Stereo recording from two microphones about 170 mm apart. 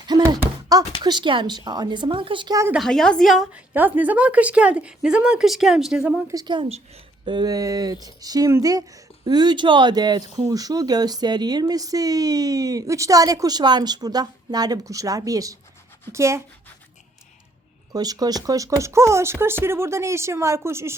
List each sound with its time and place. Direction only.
0.1 s a sound: 20° right (ahead or behind)
1.0 s speech: 25° right (ahead or behind)
2.7 s a woman's voice: centre (ahead or behind)
6.3 s speech: 25° right (ahead or behind)
17.9 s speech: 20° right (ahead or behind)